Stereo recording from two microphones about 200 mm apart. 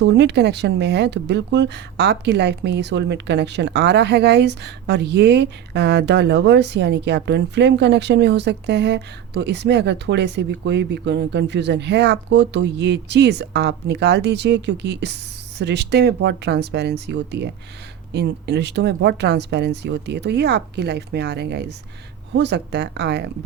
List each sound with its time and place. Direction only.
0.0 s speech: 60° right (ahead or behind)